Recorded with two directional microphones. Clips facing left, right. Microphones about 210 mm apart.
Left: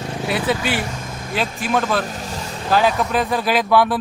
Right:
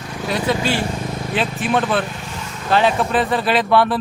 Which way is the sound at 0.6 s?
25° right (ahead or behind).